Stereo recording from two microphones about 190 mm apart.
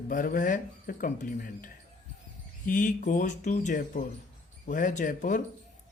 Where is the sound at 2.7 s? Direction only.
45° left (ahead or behind).